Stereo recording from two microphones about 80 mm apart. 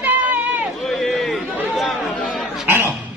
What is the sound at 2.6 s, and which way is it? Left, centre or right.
Music, right.